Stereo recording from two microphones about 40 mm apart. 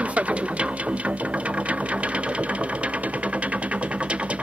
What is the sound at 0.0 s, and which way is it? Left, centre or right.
Music, right.